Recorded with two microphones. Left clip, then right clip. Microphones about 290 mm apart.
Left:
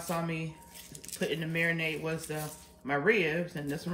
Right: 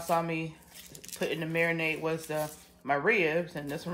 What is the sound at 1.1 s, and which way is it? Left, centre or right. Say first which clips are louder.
Speech: right 2 dB; right.